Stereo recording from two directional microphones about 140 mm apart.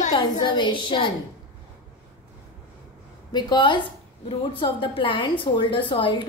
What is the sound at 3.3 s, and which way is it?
A woman's voice, 30° left (ahead or behind).